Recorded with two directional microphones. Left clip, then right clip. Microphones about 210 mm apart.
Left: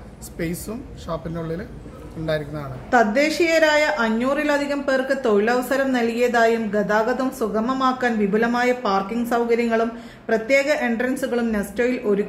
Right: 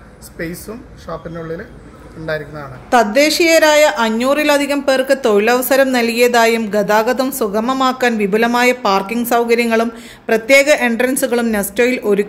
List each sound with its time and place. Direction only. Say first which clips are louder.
1.0 s speech: right 3 dB; 5° left (ahead or behind)
2.9 s a woman's voice: right 6 dB; 35° right (ahead or behind)